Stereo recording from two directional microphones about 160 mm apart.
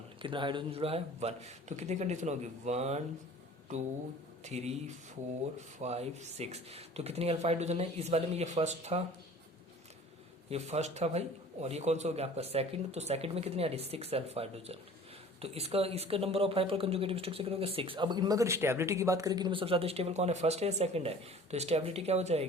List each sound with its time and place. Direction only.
0.2 s a man's voice: 30° right (ahead or behind)
4.4 s a man's voice: 45° right (ahead or behind)
10.5 s speech: 45° right (ahead or behind)